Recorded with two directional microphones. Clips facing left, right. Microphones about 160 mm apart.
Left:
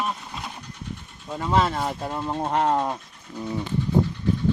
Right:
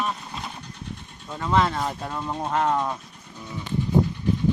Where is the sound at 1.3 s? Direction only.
30° left (ahead or behind).